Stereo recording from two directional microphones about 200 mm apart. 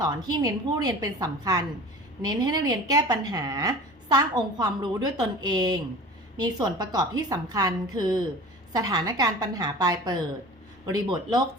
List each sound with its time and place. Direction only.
0.0 s a woman's voice: 20° right (ahead or behind)